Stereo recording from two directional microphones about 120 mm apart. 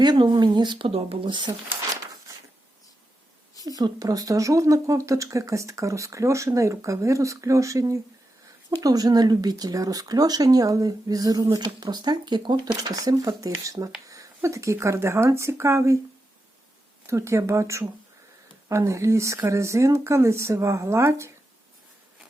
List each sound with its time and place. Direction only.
0.0 s speech: 40° right (ahead or behind)
3.6 s speech: 30° right (ahead or behind)
17.1 s speech: 25° right (ahead or behind)